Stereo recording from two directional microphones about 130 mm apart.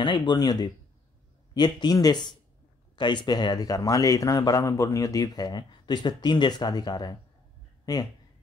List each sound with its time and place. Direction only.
0.0 s speech: 40° left (ahead or behind)